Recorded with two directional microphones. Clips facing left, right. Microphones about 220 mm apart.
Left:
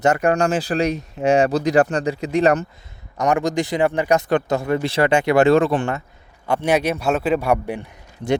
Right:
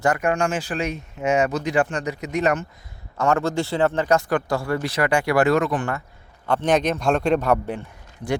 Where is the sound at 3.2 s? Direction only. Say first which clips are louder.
Left 2 dB; 15° left (ahead or behind).